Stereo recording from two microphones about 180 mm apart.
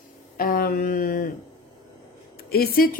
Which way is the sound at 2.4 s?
60° left (ahead or behind).